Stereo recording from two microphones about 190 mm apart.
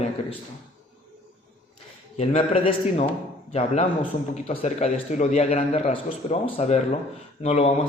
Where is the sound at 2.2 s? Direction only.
30° left (ahead or behind).